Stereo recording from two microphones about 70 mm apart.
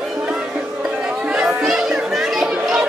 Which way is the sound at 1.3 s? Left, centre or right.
Centre.